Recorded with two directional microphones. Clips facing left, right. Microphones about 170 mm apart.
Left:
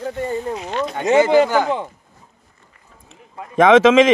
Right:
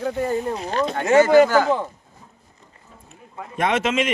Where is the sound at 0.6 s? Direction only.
35° right (ahead or behind).